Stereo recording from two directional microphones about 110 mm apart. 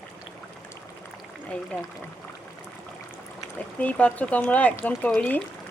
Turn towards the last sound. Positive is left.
turn(degrees=15)  # may be behind; listen again after turning